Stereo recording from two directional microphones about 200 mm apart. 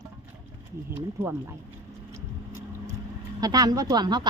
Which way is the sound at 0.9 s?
10° right (ahead or behind).